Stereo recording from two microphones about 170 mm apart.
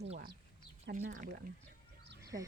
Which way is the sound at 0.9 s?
80° right.